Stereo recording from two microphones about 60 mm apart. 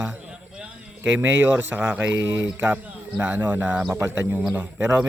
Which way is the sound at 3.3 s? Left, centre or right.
Right.